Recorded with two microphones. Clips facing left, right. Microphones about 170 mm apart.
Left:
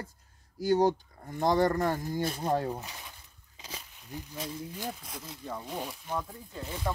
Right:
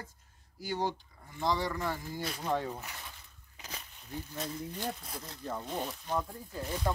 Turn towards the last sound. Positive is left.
turn(degrees=-5)  # may be behind; listen again after turning